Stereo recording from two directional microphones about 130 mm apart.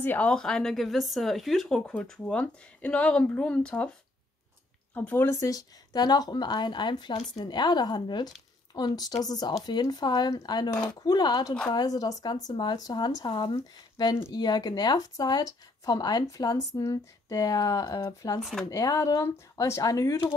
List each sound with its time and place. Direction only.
0.0 s speech: 15° left (ahead or behind)
4.9 s speech: 15° left (ahead or behind)
18.4 s speech: centre (ahead or behind)
18.7 s speech: 25° left (ahead or behind)